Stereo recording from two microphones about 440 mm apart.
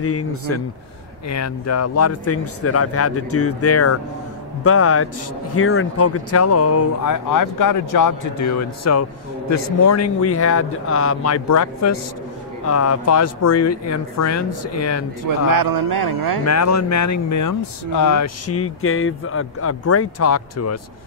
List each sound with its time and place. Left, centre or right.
0.0 s speech: left
15.2 s speech: right
16.4 s speech: left